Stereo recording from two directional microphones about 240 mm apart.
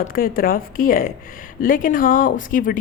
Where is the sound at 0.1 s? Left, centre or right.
Left.